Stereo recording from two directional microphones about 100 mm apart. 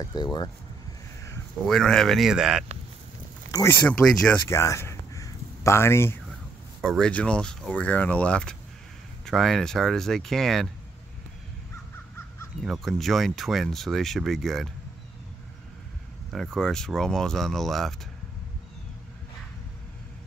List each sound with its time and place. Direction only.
0.0 s speech: 45° left (ahead or behind)
1.7 s speech: 5° left (ahead or behind)
3.7 s speech: 25° left (ahead or behind)
4.0 s speech: 5° left (ahead or behind)
4.5 s a sound: 30° left (ahead or behind)
6.8 s speech: 5° left (ahead or behind)
12.6 s speech: centre (ahead or behind)
16.5 s speech: 5° left (ahead or behind)